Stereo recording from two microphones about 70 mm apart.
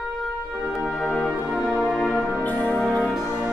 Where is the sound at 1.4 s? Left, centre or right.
Centre.